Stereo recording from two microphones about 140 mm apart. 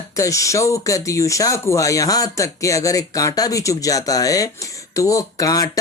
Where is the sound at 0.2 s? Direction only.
20° left (ahead or behind).